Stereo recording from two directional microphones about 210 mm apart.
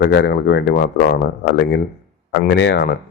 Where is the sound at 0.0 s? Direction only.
60° left (ahead or behind).